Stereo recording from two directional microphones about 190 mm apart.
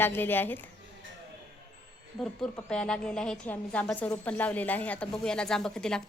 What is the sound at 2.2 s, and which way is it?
A woman's voice, 5° left (ahead or behind).